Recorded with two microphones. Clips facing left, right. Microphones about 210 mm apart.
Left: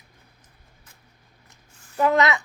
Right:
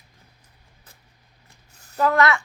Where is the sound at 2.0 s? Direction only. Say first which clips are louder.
Even; 20° left (ahead or behind).